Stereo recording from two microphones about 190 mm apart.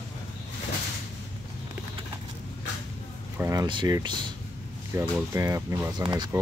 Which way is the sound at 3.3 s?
15° right (ahead or behind).